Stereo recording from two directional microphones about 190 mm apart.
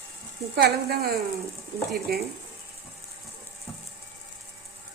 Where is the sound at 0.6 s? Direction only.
55° right (ahead or behind).